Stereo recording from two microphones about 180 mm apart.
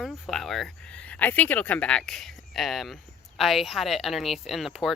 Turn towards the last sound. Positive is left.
turn(degrees=0)  # may be behind; listen again after turning